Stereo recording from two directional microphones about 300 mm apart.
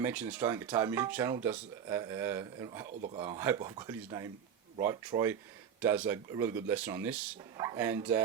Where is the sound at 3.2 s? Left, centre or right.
Centre.